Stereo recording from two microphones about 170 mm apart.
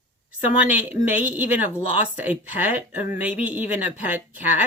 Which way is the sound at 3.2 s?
10° right (ahead or behind).